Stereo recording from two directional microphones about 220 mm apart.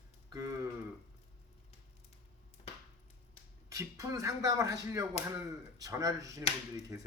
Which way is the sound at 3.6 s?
15° right (ahead or behind).